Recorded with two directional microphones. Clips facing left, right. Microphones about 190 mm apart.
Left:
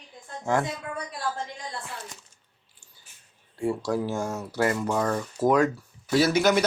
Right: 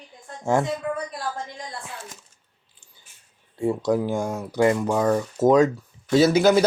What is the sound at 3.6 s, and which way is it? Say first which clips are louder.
A man's voice: right 4 dB; 20° right (ahead or behind).